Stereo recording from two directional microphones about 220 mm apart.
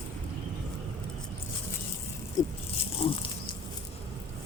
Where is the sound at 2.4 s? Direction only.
15° left (ahead or behind).